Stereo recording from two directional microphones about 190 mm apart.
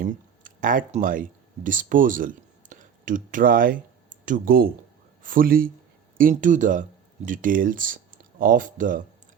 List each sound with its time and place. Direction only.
0.0 s a man's voice: 45° right (ahead or behind)